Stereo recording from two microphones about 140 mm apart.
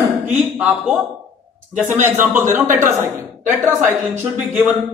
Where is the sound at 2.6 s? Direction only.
65° right (ahead or behind).